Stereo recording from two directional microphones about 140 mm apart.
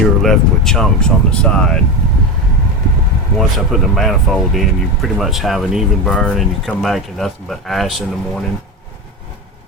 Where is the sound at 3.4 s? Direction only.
Centre (ahead or behind).